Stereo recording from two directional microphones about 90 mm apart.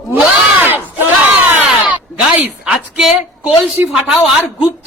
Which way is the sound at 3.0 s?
5° right (ahead or behind).